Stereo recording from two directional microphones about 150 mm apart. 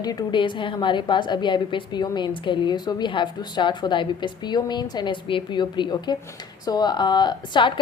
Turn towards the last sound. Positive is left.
turn(degrees=30)  # may be behind; listen again after turning